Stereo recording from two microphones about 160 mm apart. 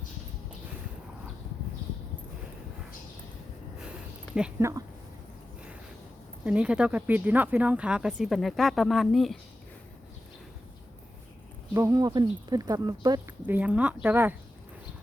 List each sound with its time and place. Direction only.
4.4 s speech: 5° right (ahead or behind)
6.4 s speech: 5° right (ahead or behind)
11.7 s speech: 20° right (ahead or behind)